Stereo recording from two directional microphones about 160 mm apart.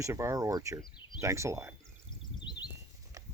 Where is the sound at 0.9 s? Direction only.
30° left (ahead or behind).